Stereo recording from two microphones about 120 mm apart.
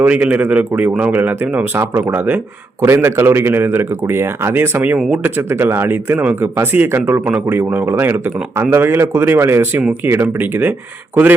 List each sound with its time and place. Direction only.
0.0 s a man's voice: 10° right (ahead or behind)
4.9 s speech: 5° right (ahead or behind)
5.2 s a man's voice: 15° right (ahead or behind)